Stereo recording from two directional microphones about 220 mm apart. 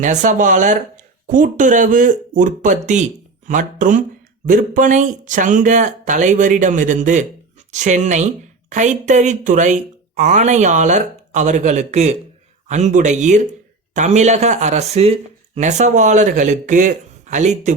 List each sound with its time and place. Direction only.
0.0 s speech: 35° right (ahead or behind)